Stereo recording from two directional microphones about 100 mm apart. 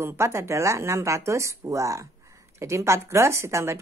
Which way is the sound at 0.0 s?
25° right (ahead or behind).